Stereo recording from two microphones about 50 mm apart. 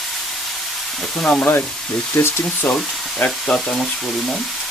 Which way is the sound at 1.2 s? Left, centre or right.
Left.